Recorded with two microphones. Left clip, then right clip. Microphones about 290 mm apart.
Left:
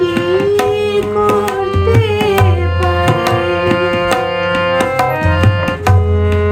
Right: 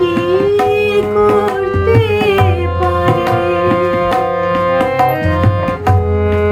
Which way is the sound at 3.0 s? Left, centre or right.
Left.